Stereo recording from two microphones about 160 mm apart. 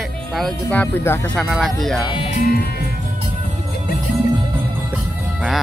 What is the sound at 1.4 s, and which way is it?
Speech, centre (ahead or behind).